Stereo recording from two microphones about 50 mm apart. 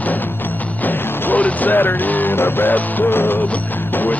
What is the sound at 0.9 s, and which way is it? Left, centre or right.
Music, left.